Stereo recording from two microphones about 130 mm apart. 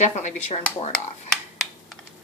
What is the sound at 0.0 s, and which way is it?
Speech, 60° left (ahead or behind).